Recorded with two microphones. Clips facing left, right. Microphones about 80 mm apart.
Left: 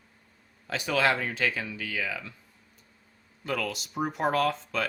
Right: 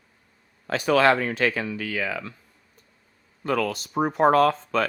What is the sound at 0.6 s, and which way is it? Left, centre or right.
Speech, right.